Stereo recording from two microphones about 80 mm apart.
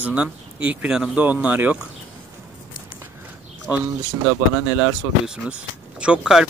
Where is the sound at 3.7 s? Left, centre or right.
Right.